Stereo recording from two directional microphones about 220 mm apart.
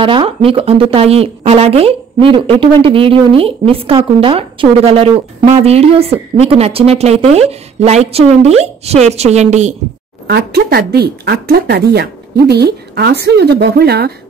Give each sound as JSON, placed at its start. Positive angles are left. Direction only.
{"t": 0.0, "sound": "a woman's voice", "side_deg": -20}
{"t": 10.2, "sound": "speech", "side_deg": -45}